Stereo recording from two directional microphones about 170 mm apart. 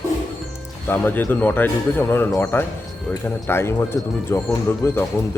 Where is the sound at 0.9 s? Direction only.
10° left (ahead or behind).